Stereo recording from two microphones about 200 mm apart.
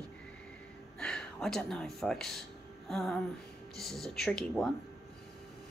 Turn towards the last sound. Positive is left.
turn(degrees=0)  # may be behind; listen again after turning